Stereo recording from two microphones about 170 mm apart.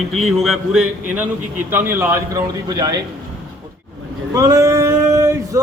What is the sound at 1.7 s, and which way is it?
A man's voice, 15° right (ahead or behind).